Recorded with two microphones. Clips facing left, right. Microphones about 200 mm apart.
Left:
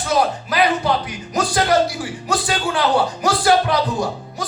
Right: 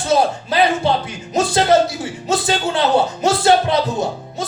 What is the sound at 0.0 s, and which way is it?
A man's voice, 25° right (ahead or behind).